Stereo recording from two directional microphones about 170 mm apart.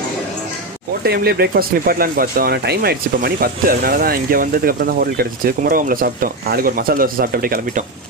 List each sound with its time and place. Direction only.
1.0 s speech: 70° right (ahead or behind)